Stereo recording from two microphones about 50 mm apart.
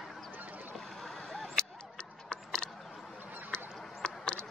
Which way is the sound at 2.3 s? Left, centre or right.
Centre.